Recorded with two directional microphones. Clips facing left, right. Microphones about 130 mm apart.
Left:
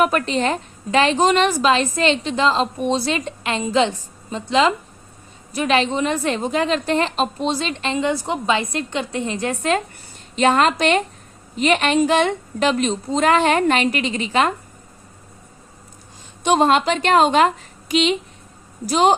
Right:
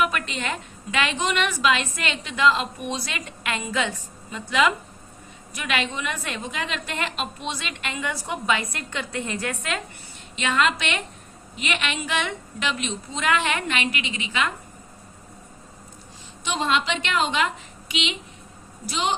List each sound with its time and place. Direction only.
0.0 s a woman's voice: 40° left (ahead or behind)
16.4 s a woman's voice: 50° left (ahead or behind)